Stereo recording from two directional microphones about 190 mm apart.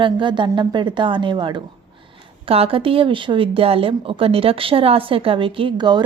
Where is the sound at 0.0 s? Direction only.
25° right (ahead or behind).